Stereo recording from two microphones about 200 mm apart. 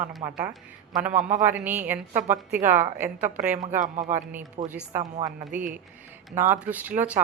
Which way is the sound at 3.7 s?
40° right (ahead or behind).